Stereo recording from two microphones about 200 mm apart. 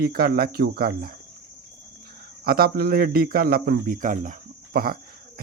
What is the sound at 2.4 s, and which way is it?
Speech, 50° right (ahead or behind).